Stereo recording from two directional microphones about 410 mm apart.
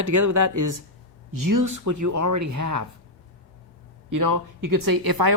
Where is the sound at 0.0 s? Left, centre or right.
Right.